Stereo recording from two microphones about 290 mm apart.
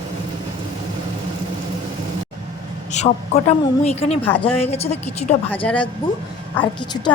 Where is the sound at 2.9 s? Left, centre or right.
Left.